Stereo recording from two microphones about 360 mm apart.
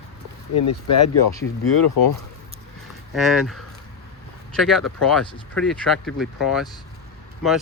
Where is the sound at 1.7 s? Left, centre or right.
Left.